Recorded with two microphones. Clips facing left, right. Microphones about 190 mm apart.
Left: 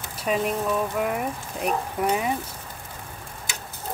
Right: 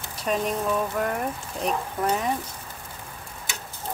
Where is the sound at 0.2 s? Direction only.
5° left (ahead or behind).